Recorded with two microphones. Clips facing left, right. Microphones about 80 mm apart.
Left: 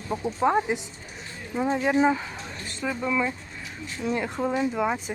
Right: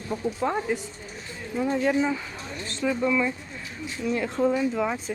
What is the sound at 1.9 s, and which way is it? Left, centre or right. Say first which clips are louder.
Speech: left 3 dB; left.